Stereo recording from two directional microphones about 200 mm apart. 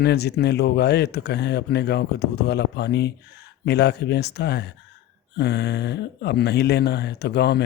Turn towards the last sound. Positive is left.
turn(degrees=55)  # may be behind; listen again after turning